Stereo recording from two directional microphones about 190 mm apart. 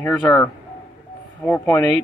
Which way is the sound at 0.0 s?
10° left (ahead or behind).